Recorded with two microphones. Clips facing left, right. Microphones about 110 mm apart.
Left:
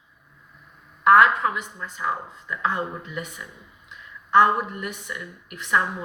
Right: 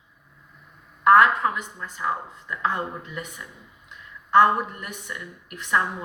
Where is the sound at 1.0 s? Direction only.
40° right (ahead or behind).